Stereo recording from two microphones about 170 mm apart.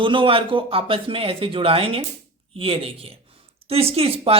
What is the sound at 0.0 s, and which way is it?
Speech, 30° right (ahead or behind).